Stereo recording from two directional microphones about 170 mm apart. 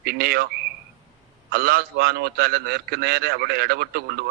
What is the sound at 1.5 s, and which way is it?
A man's voice, 65° right (ahead or behind).